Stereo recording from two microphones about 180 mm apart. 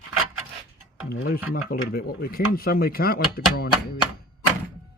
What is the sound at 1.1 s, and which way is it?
Speech, 60° left (ahead or behind).